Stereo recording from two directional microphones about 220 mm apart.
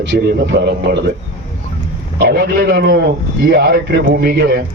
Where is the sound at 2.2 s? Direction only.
45° right (ahead or behind).